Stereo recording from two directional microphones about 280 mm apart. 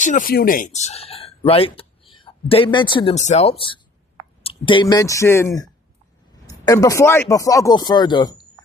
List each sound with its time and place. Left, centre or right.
0.0 s speech: left; by 5.7 s centre
6.3 s a sound: centre
6.8 s speech: centre